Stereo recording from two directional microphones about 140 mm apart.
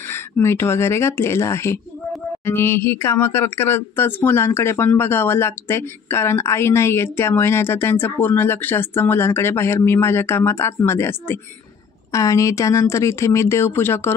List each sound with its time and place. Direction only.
0.1 s speech: 20° left (ahead or behind)